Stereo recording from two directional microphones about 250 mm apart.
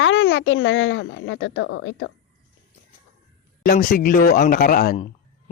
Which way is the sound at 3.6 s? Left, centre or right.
Left.